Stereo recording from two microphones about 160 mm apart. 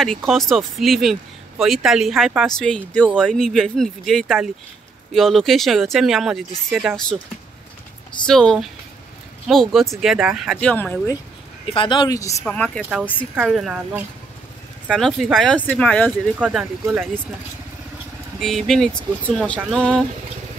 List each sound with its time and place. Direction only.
0.0 s speech: centre (ahead or behind)
8.3 s speech: 5° left (ahead or behind)
10.6 s speech: 10° left (ahead or behind)
11.6 s speech: 35° left (ahead or behind)
12.4 s speech: 5° left (ahead or behind)
16.3 s speech: 5° right (ahead or behind)
18.4 s speech: centre (ahead or behind)